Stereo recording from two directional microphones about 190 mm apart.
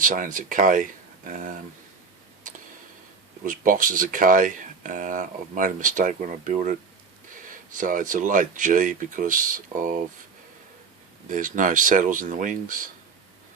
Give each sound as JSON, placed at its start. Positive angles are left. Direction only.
{"t": 0.0, "sound": "speech", "side_deg": -45}
{"t": 3.4, "sound": "speech", "side_deg": -45}
{"t": 11.3, "sound": "speech", "side_deg": -45}